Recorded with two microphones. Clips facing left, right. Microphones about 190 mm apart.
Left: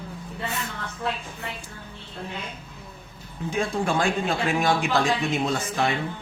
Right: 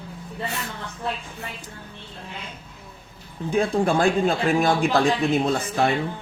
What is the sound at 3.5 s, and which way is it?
Speech, 35° right (ahead or behind).